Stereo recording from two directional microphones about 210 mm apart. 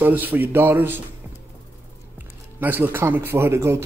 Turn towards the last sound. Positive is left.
turn(degrees=-10)  # may be behind; listen again after turning